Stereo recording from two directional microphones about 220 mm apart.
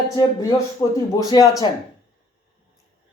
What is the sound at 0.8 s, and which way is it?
Speech, 10° left (ahead or behind).